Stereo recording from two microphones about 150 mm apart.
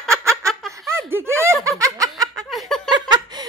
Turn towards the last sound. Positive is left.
turn(degrees=-30)  # may be behind; listen again after turning